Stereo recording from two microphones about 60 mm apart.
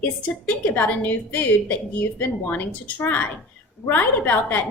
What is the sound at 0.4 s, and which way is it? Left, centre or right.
A woman's voice, left.